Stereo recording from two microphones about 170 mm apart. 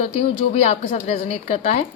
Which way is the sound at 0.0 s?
40° left (ahead or behind).